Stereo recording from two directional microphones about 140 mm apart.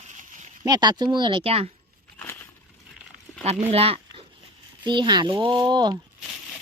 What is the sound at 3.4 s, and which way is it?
Speech, 50° right (ahead or behind).